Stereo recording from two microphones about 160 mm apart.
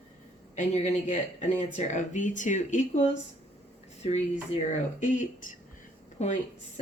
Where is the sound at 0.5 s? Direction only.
50° left (ahead or behind).